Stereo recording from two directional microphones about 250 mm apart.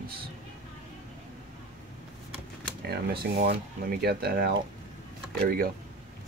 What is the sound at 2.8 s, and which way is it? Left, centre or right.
Speech, right.